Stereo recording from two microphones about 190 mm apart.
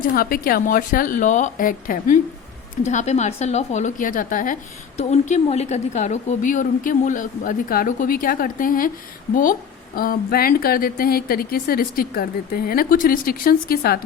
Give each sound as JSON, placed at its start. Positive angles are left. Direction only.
{"t": 0.0, "sound": "a woman's voice", "side_deg": 45}